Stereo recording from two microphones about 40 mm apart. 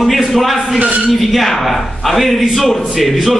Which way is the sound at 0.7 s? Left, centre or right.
Right.